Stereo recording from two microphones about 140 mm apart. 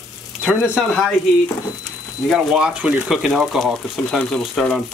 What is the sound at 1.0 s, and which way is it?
Speech, 10° left (ahead or behind).